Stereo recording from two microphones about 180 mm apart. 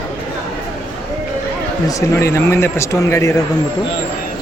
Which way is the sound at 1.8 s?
15° left (ahead or behind).